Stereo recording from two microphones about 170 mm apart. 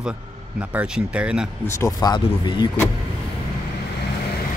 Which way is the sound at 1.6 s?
20° left (ahead or behind).